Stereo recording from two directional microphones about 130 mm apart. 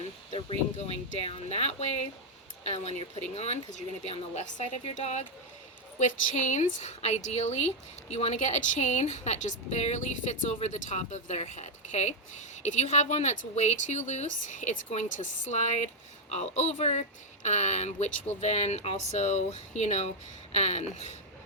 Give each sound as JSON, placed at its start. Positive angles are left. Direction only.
{"t": 0.3, "sound": "speech", "side_deg": 45}